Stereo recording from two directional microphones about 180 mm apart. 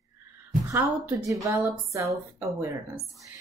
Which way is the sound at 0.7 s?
15° right (ahead or behind).